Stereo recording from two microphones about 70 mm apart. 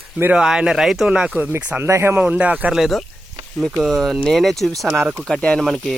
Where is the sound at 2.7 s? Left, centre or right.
Centre.